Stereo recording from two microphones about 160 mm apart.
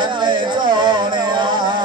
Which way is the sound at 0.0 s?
30° right (ahead or behind).